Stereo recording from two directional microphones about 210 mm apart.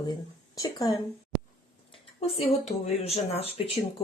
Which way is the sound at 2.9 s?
30° left (ahead or behind).